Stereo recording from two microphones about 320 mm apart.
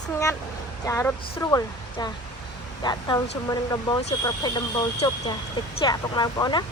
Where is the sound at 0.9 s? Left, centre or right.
Centre.